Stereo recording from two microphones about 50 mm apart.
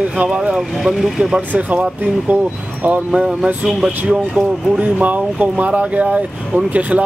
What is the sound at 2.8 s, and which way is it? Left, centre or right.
Speech, right.